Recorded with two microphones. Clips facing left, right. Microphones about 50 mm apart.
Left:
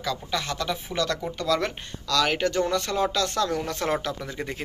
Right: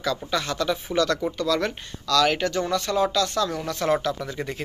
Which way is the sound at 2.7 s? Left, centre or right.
Left.